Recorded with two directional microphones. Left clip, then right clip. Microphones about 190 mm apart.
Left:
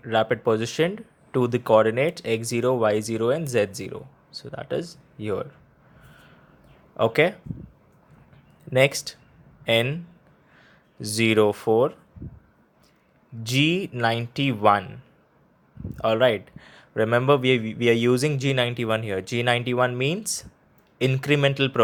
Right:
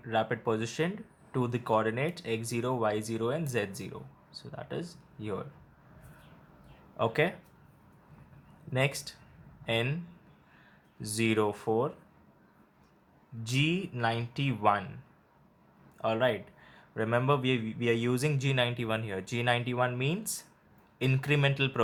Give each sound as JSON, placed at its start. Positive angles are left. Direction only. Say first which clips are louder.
{"t": 0.0, "sound": "speech", "louder": "left 8 dB", "side_deg": 35}
{"t": 6.9, "sound": "speech", "louder": "left 9 dB", "side_deg": 30}
{"t": 8.7, "sound": "speech", "louder": "left 11 dB", "side_deg": 35}
{"t": 11.0, "sound": "speech", "louder": "left 9 dB", "side_deg": 35}
{"t": 13.4, "sound": "speech", "louder": "left 9 dB", "side_deg": 35}
{"t": 16.0, "sound": "speech", "louder": "left 9 dB", "side_deg": 35}